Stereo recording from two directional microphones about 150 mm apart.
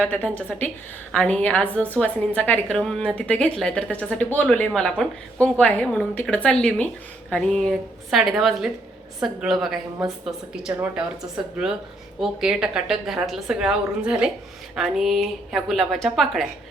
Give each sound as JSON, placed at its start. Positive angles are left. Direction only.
{"t": 0.0, "sound": "a woman's voice", "side_deg": 10}
{"t": 12.2, "sound": "a woman's voice", "side_deg": -5}